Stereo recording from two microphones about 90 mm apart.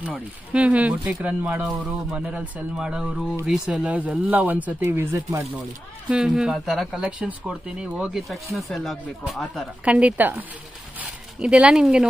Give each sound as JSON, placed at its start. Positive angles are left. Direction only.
{"t": 0.5, "sound": "speech", "side_deg": -15}
{"t": 4.8, "sound": "speech", "side_deg": -30}
{"t": 6.0, "sound": "speech", "side_deg": -10}
{"t": 7.1, "sound": "speech", "side_deg": -15}
{"t": 9.8, "sound": "speech", "side_deg": -15}